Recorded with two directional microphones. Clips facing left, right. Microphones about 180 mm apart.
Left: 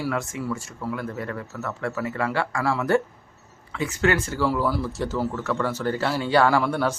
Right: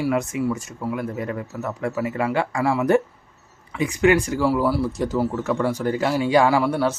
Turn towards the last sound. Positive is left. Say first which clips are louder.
# right 2 dB
turn(degrees=-5)  # may be behind; listen again after turning